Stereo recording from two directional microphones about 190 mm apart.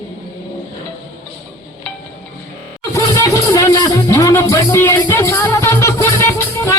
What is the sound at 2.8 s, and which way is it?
Music, 15° left (ahead or behind).